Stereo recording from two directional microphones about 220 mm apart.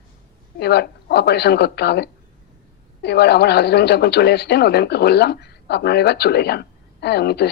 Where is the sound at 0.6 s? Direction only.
45° left (ahead or behind).